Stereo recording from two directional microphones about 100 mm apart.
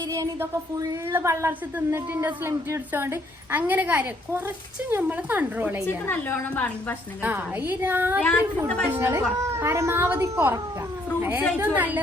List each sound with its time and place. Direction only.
0.1 s a woman's voice: 30° right (ahead or behind)
5.8 s a woman's voice: 20° left (ahead or behind)
7.2 s a woman's voice: 15° right (ahead or behind)
8.2 s a woman's voice: 15° left (ahead or behind)
8.9 s a woman's voice: 25° right (ahead or behind)